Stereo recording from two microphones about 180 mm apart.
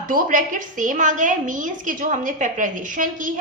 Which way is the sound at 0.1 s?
45° right (ahead or behind).